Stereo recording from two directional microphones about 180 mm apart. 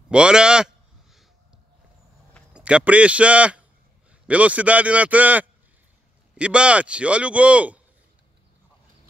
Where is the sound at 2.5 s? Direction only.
5° right (ahead or behind).